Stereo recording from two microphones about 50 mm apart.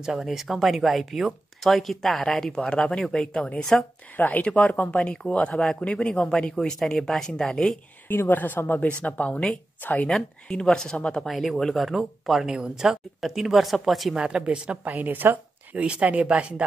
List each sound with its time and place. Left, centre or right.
0.0 s speech: centre
4.2 s a woman's voice: left
4.9 s speech: centre
8.1 s a woman's voice: left
9.8 s speech: left
10.0 s speech: centre
11.2 s speech: centre
14.1 s a woman's voice: centre; by 15.8 s right
15.8 s a woman's voice: right